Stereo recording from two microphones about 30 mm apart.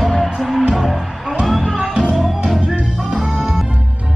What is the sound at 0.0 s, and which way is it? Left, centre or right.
Music, centre.